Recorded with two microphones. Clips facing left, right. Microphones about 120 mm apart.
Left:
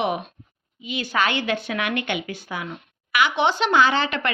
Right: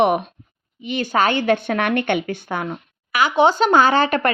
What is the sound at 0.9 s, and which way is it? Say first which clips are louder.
Speech: right 5 dB; 45° right (ahead or behind).